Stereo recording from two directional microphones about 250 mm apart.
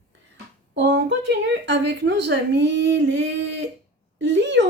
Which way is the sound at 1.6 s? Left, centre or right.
Right.